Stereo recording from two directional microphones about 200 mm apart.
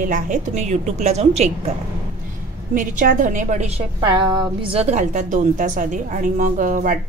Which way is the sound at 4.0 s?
20° right (ahead or behind).